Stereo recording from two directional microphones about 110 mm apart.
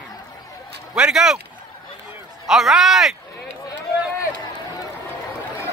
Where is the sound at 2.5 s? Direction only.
Centre (ahead or behind).